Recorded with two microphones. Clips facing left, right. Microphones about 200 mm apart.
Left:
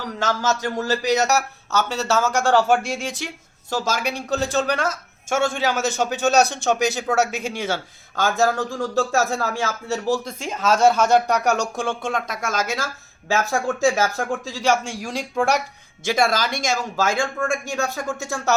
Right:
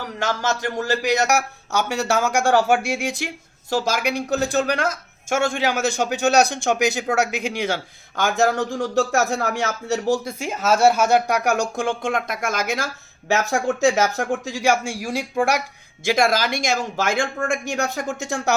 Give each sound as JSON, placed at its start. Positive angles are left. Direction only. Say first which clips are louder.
{"t": 0.2, "sound": "speech", "louder": "left 1 dB", "side_deg": -15}